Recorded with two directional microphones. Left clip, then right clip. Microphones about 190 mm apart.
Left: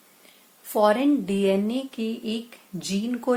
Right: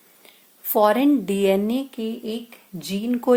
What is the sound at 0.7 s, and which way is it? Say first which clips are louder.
A woman's voice: right 3 dB; 40° right (ahead or behind).